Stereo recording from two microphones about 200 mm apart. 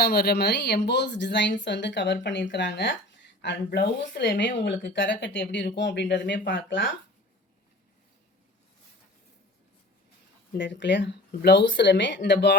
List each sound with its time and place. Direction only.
0.0 s speech: 50° left (ahead or behind)
10.6 s speech: 65° left (ahead or behind)